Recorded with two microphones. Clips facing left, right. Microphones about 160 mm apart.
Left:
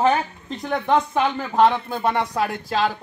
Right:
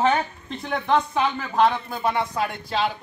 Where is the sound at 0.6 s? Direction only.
45° left (ahead or behind).